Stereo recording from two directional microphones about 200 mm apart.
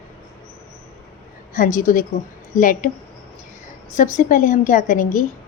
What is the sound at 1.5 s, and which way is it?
Speech, 40° left (ahead or behind).